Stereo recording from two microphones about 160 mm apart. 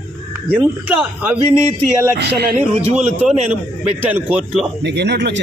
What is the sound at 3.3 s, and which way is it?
Speech, 45° right (ahead or behind).